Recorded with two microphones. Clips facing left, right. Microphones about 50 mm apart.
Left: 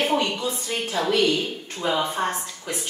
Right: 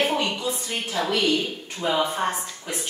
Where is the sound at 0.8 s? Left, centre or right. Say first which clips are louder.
Left 2 dB; centre.